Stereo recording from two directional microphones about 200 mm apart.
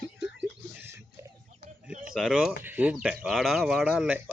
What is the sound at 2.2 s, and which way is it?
Speech, centre (ahead or behind).